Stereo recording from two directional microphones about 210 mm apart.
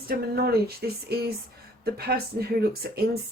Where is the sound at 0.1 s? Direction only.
50° right (ahead or behind).